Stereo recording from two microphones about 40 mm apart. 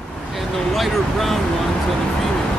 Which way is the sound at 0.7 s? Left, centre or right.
Centre.